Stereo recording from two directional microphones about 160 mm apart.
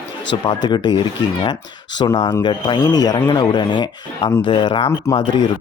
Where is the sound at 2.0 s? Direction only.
25° left (ahead or behind).